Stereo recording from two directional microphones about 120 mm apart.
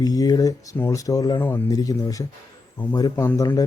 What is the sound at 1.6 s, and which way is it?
Speech, 30° left (ahead or behind).